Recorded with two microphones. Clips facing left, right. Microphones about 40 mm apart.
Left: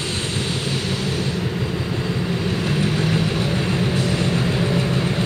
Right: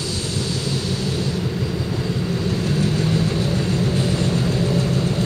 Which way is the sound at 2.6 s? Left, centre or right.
Left.